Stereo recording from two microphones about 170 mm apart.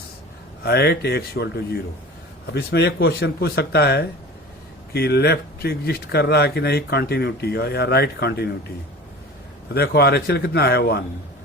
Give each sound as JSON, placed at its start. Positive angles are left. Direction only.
{"t": 0.6, "sound": "speech", "side_deg": 70}
{"t": 9.7, "sound": "speech", "side_deg": 70}